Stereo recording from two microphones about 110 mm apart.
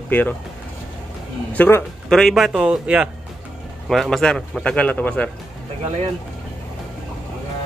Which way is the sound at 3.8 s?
Centre (ahead or behind).